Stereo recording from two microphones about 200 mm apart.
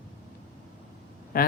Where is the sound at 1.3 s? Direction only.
45° left (ahead or behind).